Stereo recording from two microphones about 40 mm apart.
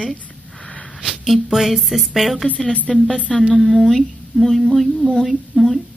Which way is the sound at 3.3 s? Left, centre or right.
Centre.